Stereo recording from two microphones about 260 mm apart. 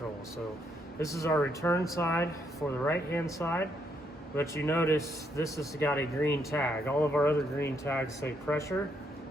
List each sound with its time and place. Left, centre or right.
0.9 s speech: centre